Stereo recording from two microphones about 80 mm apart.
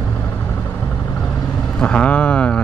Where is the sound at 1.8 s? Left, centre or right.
Centre.